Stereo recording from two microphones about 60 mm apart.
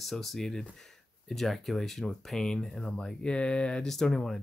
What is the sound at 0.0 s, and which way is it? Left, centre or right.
Speech, centre.